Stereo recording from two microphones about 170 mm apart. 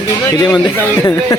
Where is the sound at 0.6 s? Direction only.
20° left (ahead or behind).